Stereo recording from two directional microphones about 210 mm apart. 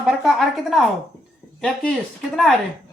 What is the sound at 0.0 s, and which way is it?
A woman's voice, centre (ahead or behind).